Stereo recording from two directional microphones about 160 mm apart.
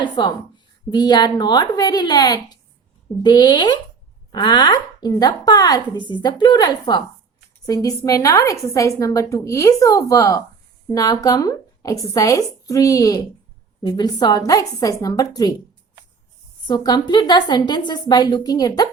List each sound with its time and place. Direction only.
0.0 s a woman's voice: 30° left (ahead or behind)
16.6 s a woman's voice: 25° left (ahead or behind)